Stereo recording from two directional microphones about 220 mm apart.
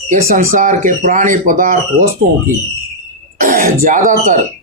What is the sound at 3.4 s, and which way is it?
Throat clearing, 40° right (ahead or behind).